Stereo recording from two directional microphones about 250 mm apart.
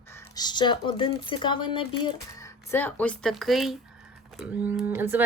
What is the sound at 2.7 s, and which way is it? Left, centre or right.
Speech, centre.